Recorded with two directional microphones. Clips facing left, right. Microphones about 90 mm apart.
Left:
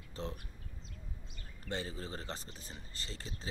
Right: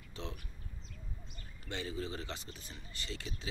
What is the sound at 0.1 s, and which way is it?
Speech, 35° left (ahead or behind).